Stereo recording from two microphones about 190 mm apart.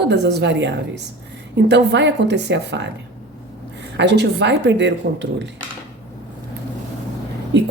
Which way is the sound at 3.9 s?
65° right (ahead or behind).